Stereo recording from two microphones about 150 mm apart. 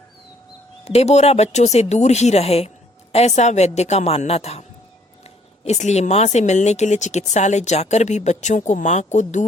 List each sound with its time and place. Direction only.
0.9 s speech: 45° left (ahead or behind)
5.6 s speech: 50° left (ahead or behind)